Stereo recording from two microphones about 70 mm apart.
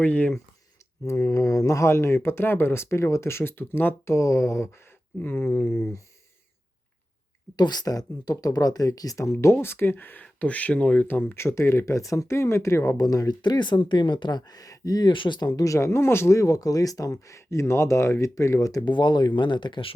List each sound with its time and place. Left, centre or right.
0.0 s speech: left
1.0 s speech: left
4.1 s speech: left
5.2 s speech: left
7.5 s speech: left; by 11.0 s centre
11.1 s speech: left
11.9 s speech: left
13.0 s speech: left
18.9 s speech: left